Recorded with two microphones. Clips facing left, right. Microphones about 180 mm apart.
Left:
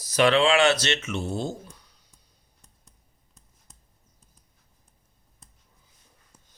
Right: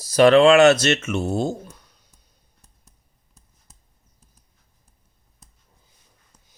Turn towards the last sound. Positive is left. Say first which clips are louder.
# left 1 dB
turn(degrees=10)  # may be behind; listen again after turning